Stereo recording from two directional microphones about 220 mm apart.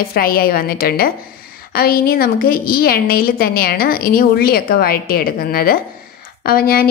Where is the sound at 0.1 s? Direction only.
40° left (ahead or behind).